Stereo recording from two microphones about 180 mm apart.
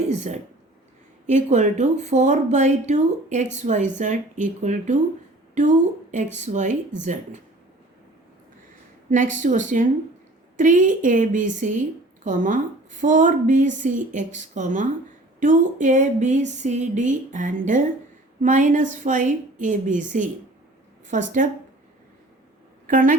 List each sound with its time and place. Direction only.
0.1 s speech: 40° right (ahead or behind)
1.5 s speech: 40° right (ahead or behind)
9.0 s a woman's voice: 45° right (ahead or behind)
22.9 s a woman's voice: 50° right (ahead or behind)